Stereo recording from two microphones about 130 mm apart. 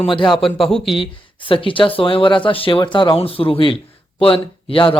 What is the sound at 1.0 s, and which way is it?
Speech, 40° left (ahead or behind).